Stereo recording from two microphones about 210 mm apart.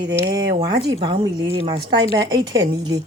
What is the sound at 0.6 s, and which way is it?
Speech, 20° right (ahead or behind).